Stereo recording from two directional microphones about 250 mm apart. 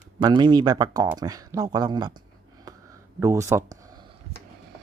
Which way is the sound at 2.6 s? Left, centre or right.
Centre.